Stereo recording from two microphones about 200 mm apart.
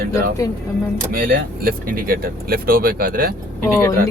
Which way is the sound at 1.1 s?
45° right (ahead or behind).